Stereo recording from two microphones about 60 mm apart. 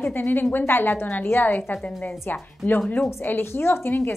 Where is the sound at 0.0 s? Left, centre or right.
Left.